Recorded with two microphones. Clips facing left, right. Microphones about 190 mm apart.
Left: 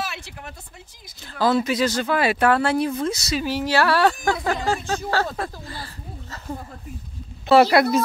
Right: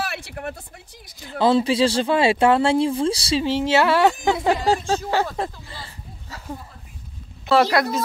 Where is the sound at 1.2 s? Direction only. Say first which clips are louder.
Right 2 dB; 20° right (ahead or behind).